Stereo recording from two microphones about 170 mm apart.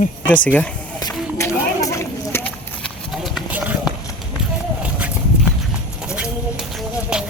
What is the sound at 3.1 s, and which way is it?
Horse, centre (ahead or behind).